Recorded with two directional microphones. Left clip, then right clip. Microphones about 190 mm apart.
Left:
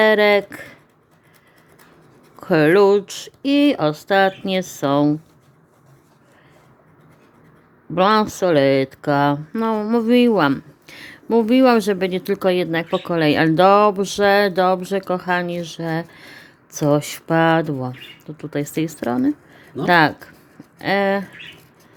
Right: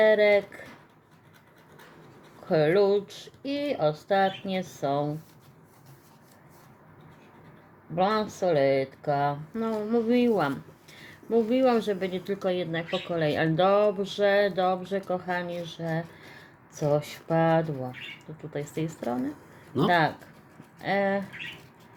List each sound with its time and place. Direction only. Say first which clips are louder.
0.0 s speech: left 6 dB; 40° left (ahead or behind)
2.5 s speech: left 9 dB; 45° left (ahead or behind)
7.9 s speech: left 10 dB; 40° left (ahead or behind)